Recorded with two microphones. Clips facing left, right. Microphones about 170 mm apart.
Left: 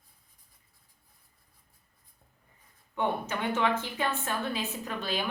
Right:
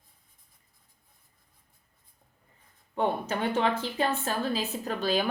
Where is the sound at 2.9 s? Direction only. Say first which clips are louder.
Right 2 dB; 35° right (ahead or behind).